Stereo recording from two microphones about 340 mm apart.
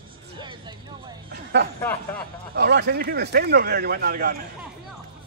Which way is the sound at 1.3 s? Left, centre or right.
Right.